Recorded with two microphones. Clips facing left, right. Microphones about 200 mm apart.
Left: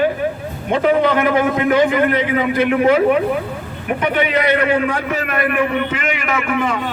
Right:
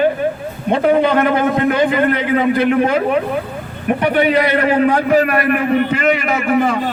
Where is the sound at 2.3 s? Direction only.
35° right (ahead or behind).